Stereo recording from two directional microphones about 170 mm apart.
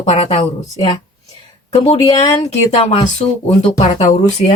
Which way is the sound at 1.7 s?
35° left (ahead or behind).